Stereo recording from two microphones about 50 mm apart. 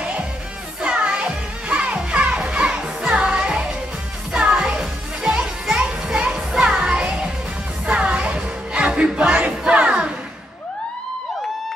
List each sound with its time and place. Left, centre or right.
0.8 s music: right
4.4 s children playing: centre
6.6 s music: centre